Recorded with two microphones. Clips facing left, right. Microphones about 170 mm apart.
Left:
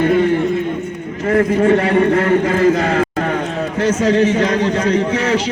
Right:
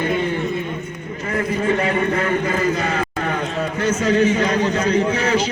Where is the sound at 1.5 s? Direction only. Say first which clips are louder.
Left 4 dB; 70° left (ahead or behind).